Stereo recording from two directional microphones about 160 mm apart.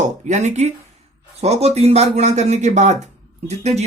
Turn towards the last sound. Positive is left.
turn(degrees=-45)  # may be behind; listen again after turning